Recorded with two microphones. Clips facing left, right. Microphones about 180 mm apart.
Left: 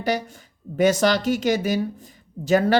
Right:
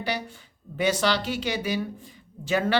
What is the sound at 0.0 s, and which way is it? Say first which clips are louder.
Speech: left 6 dB; 45° left (ahead or behind).